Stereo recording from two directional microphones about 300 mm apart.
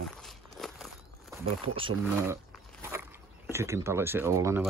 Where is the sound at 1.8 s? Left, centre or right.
Centre.